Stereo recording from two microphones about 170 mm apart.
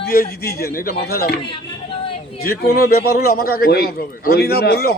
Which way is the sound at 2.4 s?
65° left (ahead or behind).